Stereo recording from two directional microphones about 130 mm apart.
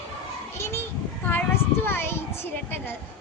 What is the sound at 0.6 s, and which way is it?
Speech, 20° left (ahead or behind).